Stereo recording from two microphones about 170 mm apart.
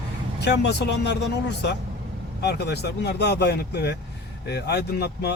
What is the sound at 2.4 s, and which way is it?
Speech, 75° left (ahead or behind).